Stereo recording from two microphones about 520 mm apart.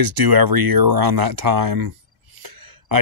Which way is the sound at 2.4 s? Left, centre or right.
Right.